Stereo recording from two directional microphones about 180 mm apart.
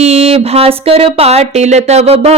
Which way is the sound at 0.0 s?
35° right (ahead or behind).